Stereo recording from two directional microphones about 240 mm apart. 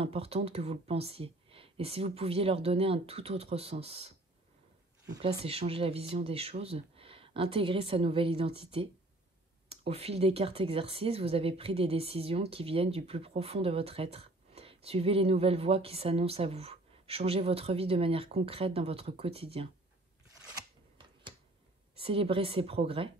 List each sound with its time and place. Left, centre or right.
0.0 s speech: right
5.4 s speech: right
21.9 s speech: right